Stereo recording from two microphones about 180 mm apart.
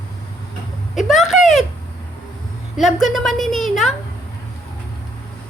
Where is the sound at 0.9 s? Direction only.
Centre (ahead or behind).